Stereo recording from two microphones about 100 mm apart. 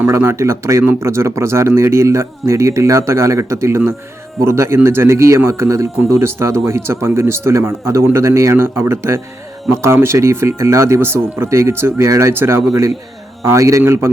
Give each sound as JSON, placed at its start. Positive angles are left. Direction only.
{"t": 0.0, "sound": "a man's voice", "side_deg": -25}